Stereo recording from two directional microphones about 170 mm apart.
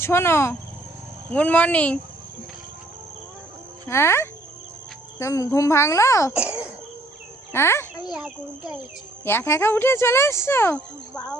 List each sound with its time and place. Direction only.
0.0 s speech: 15° left (ahead or behind)
3.8 s speech: 15° left (ahead or behind)
6.3 s cough: 5° right (ahead or behind)
7.5 s a child's voice: 15° left (ahead or behind)
8.1 s speech: 5° right (ahead or behind)
9.2 s speech: 15° left (ahead or behind)